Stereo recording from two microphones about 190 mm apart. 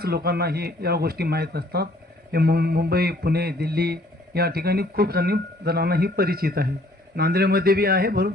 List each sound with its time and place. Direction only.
0.0 s speech: 55° right (ahead or behind)